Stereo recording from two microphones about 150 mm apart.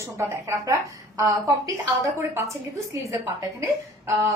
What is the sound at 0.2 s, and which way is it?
A woman's voice, 20° right (ahead or behind).